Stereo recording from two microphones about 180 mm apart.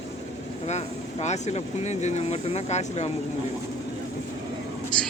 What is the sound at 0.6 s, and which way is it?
Speech, 40° left (ahead or behind).